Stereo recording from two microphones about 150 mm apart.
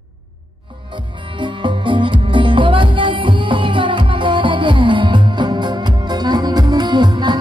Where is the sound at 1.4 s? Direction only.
35° right (ahead or behind).